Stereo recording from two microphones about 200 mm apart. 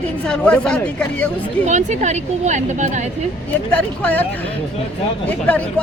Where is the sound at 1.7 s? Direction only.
35° right (ahead or behind).